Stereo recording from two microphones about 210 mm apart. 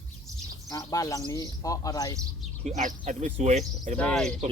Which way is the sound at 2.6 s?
35° right (ahead or behind).